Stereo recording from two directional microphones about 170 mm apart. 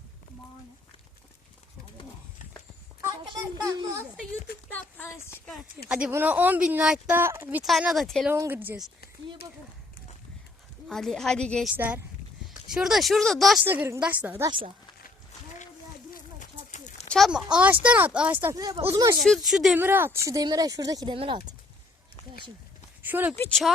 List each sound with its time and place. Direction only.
3.6 s speech: 20° right (ahead or behind)
4.7 s speech: 10° left (ahead or behind)
5.9 s speech: 10° right (ahead or behind)
7.6 s a woman's voice: centre (ahead or behind)
8.3 s speech: 10° right (ahead or behind)
10.8 s a woman's voice: centre (ahead or behind)
12.7 s a woman's voice: centre (ahead or behind)
13.7 s speech: 15° right (ahead or behind)
16.4 s a sound: 45° left (ahead or behind)
17.1 s a woman's voice: centre (ahead or behind); by 19.1 s 15° right (ahead or behind)
19.2 s a woman's voice: centre (ahead or behind)
19.8 s speech: 15° right (ahead or behind); by 21.3 s 30° right (ahead or behind)
23.0 s speech: 10° right (ahead or behind)
23.3 s speech: 15° left (ahead or behind)